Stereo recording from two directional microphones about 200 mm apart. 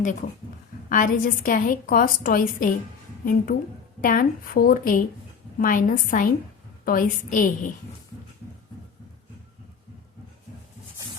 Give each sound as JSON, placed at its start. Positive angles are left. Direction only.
{"t": 0.0, "sound": "a woman's voice", "side_deg": 40}